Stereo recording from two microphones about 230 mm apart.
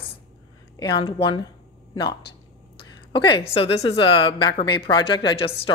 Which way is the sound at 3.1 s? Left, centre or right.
Left.